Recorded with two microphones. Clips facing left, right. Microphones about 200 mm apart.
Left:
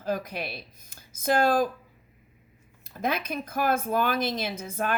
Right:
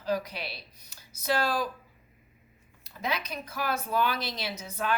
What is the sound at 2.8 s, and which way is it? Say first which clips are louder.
A woman's voice: left 4 dB; 50° left (ahead or behind).